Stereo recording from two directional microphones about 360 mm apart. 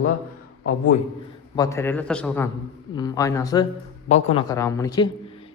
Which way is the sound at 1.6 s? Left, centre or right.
Centre.